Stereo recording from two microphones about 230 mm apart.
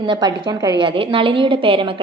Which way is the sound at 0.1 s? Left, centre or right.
Centre.